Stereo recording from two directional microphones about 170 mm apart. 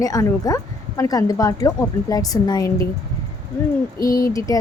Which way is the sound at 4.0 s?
20° left (ahead or behind).